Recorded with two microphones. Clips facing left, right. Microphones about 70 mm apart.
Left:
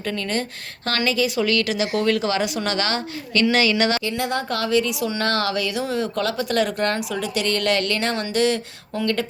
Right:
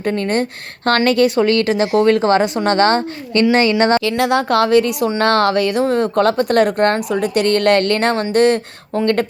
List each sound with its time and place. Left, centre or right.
0.0 s speech: right
0.9 s speech: right
4.1 s a woman's voice: right